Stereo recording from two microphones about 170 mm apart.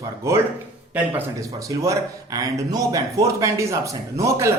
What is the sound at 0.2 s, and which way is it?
Speech, 15° right (ahead or behind).